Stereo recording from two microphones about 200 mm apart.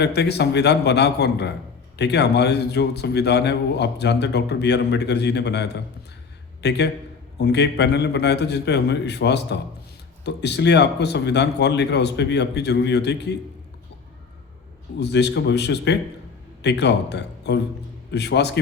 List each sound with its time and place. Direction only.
0.0 s a man's voice: 55° left (ahead or behind)
14.9 s a man's voice: 60° left (ahead or behind)